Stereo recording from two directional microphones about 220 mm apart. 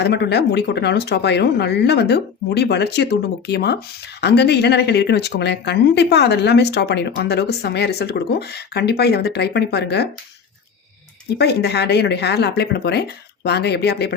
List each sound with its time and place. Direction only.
0.0 s speech: 50° left (ahead or behind)
11.3 s speech: 50° left (ahead or behind)